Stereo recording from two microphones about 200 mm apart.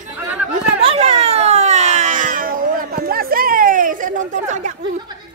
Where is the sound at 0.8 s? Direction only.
30° right (ahead or behind).